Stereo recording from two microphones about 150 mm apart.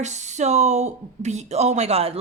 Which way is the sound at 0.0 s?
50° right (ahead or behind).